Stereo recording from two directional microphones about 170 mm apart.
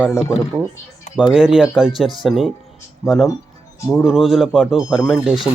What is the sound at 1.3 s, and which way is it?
Speech, 5° right (ahead or behind).